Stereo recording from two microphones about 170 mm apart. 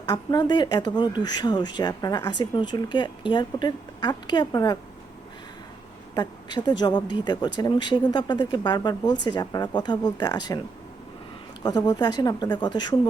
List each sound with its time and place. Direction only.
0.1 s speech: 25° left (ahead or behind)
6.1 s speech: 25° left (ahead or behind)
11.6 s speech: 25° left (ahead or behind)